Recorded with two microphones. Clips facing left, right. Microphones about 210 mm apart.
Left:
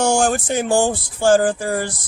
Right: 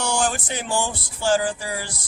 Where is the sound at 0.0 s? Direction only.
45° left (ahead or behind).